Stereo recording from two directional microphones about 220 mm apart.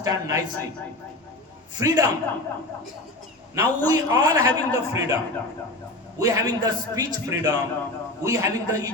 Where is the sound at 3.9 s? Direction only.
15° right (ahead or behind).